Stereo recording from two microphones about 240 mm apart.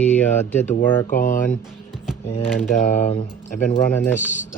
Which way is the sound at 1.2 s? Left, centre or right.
Left.